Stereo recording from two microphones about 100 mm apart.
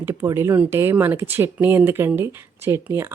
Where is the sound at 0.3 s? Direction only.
25° right (ahead or behind).